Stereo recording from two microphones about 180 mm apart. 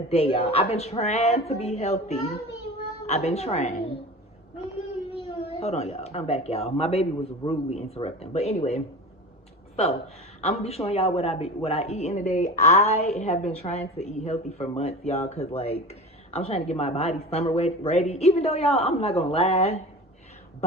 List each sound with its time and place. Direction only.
0.1 s speech: 35° left (ahead or behind)
5.5 s speech: 35° left (ahead or behind)
10.4 s speech: 35° left (ahead or behind)